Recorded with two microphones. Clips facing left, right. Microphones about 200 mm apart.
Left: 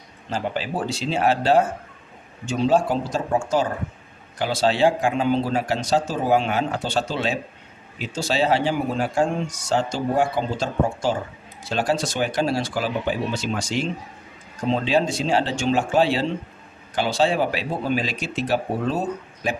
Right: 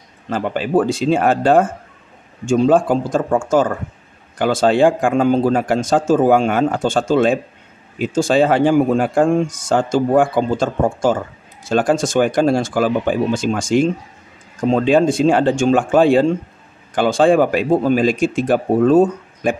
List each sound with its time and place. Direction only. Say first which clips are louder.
0.3 s speech: right 8 dB; 55° right (ahead or behind)